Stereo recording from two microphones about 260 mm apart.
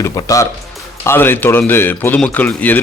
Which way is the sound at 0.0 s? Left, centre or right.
Centre.